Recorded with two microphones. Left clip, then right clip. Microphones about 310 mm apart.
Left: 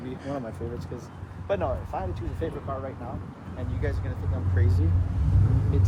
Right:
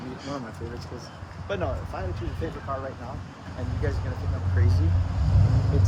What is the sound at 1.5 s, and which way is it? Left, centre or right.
Speech, left.